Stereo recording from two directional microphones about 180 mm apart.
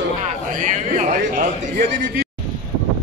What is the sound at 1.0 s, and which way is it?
A man's voice, 45° right (ahead or behind).